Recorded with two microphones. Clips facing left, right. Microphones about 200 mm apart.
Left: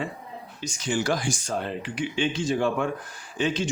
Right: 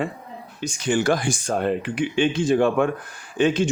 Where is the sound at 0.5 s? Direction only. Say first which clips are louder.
Right 5 dB; 55° right (ahead or behind).